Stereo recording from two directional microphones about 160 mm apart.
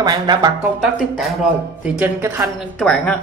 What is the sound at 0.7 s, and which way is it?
Speech, 5° right (ahead or behind).